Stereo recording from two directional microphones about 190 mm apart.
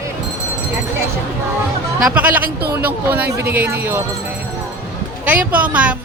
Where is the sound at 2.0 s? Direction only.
5° right (ahead or behind).